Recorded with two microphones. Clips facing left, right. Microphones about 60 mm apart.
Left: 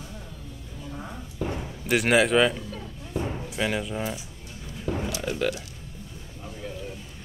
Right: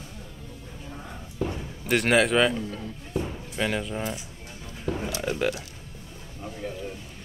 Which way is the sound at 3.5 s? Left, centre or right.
Centre.